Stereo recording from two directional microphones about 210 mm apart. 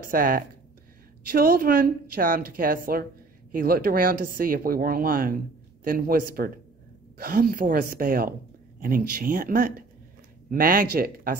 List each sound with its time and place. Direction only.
0.0 s a woman's voice: 40° right (ahead or behind)